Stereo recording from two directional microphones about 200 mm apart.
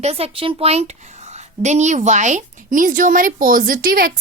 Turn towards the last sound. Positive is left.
turn(degrees=-45)  # may be behind; listen again after turning